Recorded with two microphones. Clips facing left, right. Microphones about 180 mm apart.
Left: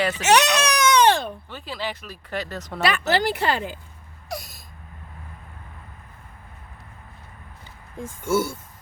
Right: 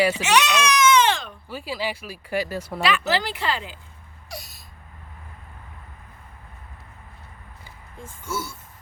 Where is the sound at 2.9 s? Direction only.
50° left (ahead or behind).